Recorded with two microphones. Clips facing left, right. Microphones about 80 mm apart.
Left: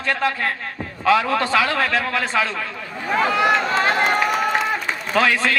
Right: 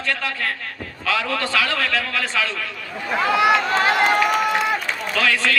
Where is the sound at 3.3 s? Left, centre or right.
Centre.